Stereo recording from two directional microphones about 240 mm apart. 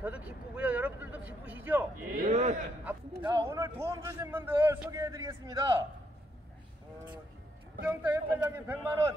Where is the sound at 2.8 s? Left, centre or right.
Centre.